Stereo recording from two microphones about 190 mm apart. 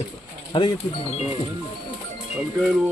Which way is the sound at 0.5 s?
25° left (ahead or behind).